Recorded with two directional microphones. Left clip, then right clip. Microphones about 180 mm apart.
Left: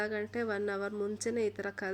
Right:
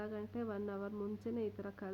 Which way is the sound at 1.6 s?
25° left (ahead or behind).